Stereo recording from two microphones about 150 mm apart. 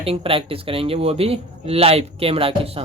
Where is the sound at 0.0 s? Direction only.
40° right (ahead or behind).